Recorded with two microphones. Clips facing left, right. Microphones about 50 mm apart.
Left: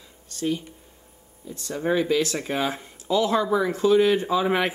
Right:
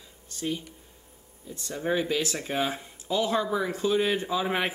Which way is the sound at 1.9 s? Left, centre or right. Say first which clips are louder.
Left 6 dB; centre.